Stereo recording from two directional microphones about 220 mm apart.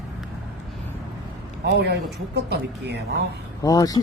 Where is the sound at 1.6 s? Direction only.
50° right (ahead or behind).